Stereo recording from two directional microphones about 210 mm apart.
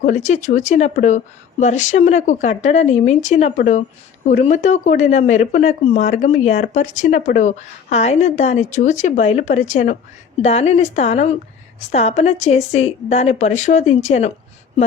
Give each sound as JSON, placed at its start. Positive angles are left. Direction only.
{"t": 0.0, "sound": "speech", "side_deg": 35}